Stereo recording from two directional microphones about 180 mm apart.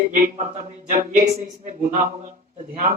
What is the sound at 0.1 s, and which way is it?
Speech, 45° right (ahead or behind).